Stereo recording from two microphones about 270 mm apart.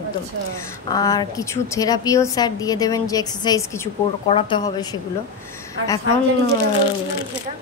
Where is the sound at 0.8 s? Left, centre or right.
Centre.